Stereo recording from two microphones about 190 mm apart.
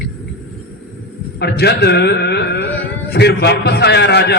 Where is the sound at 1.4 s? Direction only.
60° left (ahead or behind).